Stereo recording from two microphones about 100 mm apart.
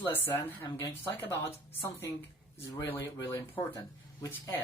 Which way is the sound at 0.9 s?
20° left (ahead or behind).